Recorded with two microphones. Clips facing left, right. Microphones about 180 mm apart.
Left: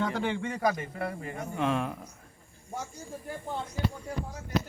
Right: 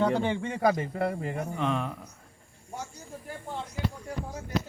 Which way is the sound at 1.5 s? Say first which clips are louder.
Left 3 dB; 5° left (ahead or behind).